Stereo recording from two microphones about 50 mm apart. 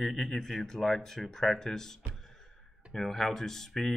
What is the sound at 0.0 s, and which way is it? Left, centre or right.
Speech, centre.